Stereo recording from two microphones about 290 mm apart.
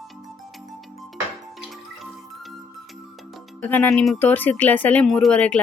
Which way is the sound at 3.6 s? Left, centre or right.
Centre.